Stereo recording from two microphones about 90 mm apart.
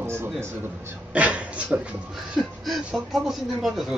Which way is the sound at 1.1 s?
15° right (ahead or behind).